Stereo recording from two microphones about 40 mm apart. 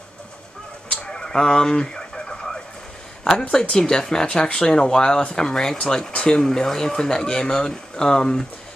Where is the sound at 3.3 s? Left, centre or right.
Centre.